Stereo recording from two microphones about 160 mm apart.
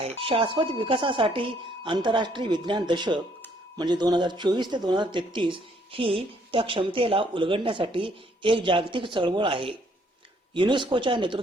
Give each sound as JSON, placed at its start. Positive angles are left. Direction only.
{"t": 0.0, "sound": "speech", "side_deg": -35}